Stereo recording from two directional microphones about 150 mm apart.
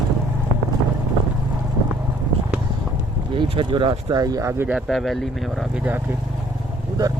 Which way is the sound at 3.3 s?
35° right (ahead or behind).